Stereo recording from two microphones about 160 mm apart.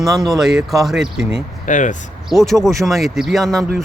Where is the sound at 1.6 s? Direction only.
50° left (ahead or behind).